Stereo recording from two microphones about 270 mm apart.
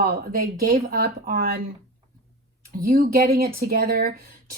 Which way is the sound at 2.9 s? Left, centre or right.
Right.